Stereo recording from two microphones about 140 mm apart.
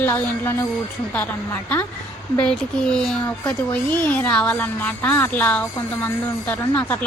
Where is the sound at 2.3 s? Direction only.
5° left (ahead or behind).